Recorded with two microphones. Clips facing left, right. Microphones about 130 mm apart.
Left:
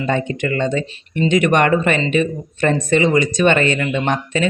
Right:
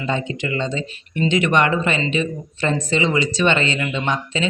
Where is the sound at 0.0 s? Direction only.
50° left (ahead or behind).